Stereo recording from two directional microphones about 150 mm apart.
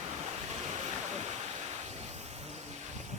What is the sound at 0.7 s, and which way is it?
Waterfall, 50° right (ahead or behind).